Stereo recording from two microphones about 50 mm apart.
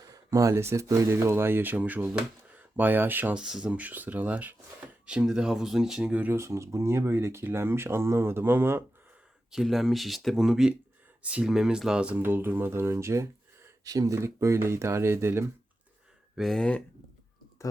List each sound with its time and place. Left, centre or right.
0.4 s speech: right
1.7 s speech: right
3.3 s speech: centre
3.7 s speech: right
5.0 s speech: centre
6.0 s speech: right
6.3 s speech: right
9.5 s speech: centre
11.2 s speech: right
11.4 s speech: centre
11.9 s speech: right
12.2 s speech: right
16.6 s speech: left